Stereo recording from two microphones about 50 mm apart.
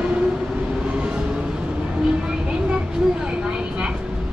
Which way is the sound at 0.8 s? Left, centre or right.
Centre.